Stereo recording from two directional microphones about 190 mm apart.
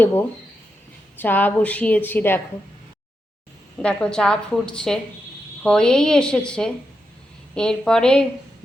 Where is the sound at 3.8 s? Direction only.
5° left (ahead or behind).